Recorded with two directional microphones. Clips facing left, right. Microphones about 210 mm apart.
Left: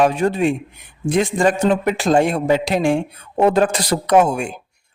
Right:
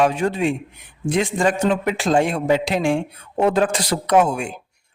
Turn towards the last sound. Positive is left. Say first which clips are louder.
# left 2 dB
turn(degrees=45)  # may be behind; listen again after turning